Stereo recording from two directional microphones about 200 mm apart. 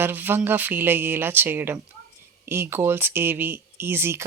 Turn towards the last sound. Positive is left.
turn(degrees=-10)  # may be behind; listen again after turning